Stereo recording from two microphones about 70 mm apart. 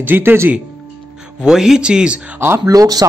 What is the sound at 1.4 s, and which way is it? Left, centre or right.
Speech, centre.